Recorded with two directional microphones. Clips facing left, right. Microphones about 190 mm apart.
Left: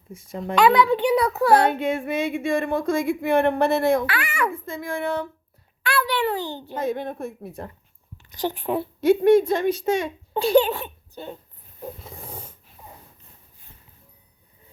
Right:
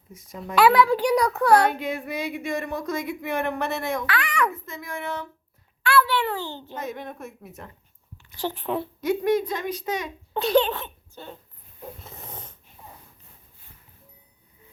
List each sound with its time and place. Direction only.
0.1 s speech: 30° left (ahead or behind)
0.5 s a child's voice: 5° right (ahead or behind)
1.5 s a woman's voice: 25° left (ahead or behind)
4.1 s a child's voice: 5° left (ahead or behind)
4.4 s speech: 30° left (ahead or behind)
5.8 s a child's voice: 15° left (ahead or behind)
6.7 s a woman's voice: 30° left (ahead or behind)
8.4 s a child's voice: 15° left (ahead or behind)
9.0 s speech: 30° left (ahead or behind)
10.3 s a child's voice: 10° left (ahead or behind)
12.2 s snoring: 10° left (ahead or behind)